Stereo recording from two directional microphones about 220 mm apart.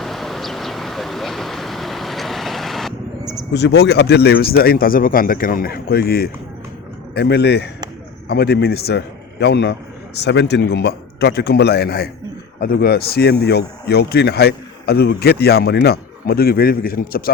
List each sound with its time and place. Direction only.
0.0 s vehicle: centre (ahead or behind)
3.5 s speech: 50° left (ahead or behind)